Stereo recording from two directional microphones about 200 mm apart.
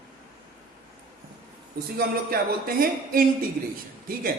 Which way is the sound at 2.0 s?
50° right (ahead or behind).